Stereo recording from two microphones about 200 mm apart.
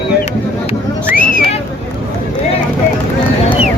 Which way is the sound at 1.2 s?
40° left (ahead or behind).